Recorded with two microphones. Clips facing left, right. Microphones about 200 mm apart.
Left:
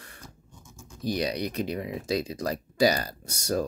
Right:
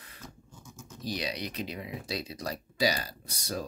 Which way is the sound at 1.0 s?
50° left (ahead or behind).